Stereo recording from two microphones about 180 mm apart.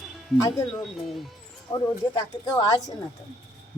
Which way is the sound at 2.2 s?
20° left (ahead or behind).